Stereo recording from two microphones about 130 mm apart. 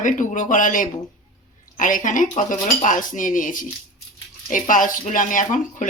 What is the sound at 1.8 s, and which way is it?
Cutlery, 90° left.